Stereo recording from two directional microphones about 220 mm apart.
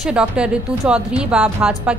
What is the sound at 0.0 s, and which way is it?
A woman's voice, 5° right (ahead or behind).